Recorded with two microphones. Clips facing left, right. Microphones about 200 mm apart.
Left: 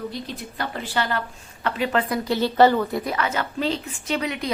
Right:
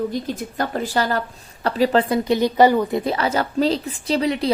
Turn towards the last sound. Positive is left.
turn(degrees=-35)  # may be behind; listen again after turning